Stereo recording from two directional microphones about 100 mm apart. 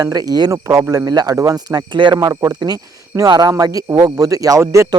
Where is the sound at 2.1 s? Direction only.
35° right (ahead or behind).